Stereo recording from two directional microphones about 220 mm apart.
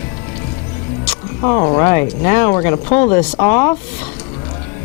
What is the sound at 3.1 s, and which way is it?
Speech, 10° left (ahead or behind).